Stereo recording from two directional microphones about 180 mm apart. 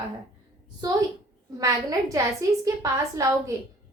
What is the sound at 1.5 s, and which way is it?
A woman's voice, 20° right (ahead or behind).